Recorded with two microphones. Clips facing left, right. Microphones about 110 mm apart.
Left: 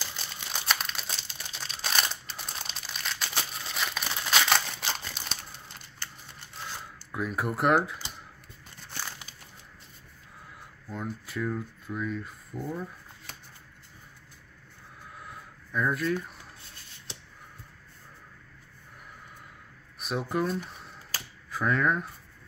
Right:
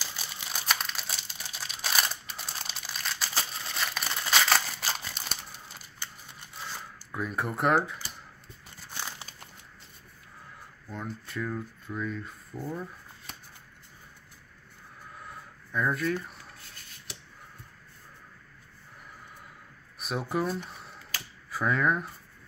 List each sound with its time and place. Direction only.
0.0 s crumpling: 5° right (ahead or behind)
6.6 s zipper: centre (ahead or behind)
9.3 s a sound: 45° right (ahead or behind)
10.9 s speech: 5° left (ahead or behind)
15.1 s a sound: centre (ahead or behind)
20.0 s speech: centre (ahead or behind)